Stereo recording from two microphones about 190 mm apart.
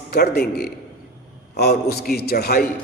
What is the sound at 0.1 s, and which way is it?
A man's voice, 55° left (ahead or behind).